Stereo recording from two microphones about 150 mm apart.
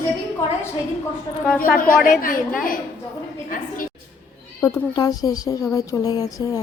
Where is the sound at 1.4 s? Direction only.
10° left (ahead or behind).